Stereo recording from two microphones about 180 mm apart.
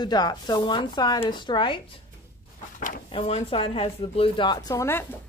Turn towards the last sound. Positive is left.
turn(degrees=15)  # may be behind; listen again after turning